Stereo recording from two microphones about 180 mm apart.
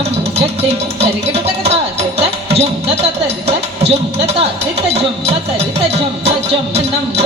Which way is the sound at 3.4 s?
35° right (ahead or behind).